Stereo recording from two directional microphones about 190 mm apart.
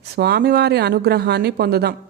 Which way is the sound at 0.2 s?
55° right (ahead or behind).